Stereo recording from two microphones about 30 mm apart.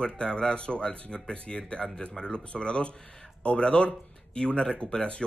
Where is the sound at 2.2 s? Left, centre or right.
Left.